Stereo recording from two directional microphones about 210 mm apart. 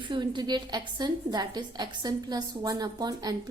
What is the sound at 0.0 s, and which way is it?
A woman's voice, 20° right (ahead or behind).